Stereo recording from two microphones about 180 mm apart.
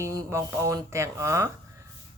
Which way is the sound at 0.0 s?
15° right (ahead or behind).